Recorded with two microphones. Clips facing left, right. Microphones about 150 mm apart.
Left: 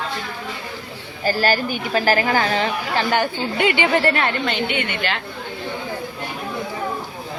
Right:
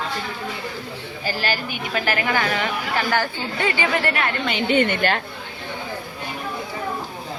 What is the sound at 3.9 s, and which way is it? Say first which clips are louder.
Speech: left 4 dB; 30° left (ahead or behind).